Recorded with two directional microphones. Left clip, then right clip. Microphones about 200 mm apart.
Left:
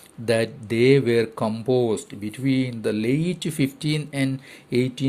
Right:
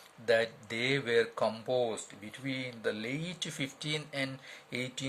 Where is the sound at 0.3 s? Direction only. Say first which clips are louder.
Left 6 dB; 35° left (ahead or behind).